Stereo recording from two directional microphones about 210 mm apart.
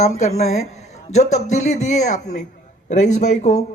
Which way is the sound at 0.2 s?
30° left (ahead or behind).